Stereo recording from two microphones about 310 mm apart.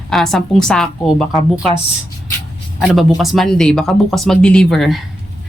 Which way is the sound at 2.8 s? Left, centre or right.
Centre.